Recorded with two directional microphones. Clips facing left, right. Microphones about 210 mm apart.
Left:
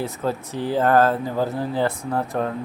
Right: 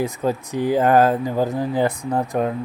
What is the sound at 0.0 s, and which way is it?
Speech, 15° right (ahead or behind).